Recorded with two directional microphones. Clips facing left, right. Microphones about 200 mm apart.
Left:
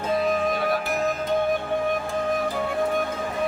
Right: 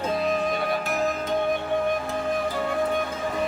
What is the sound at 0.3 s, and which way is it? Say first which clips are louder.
Music: left 2 dB; centre (ahead or behind).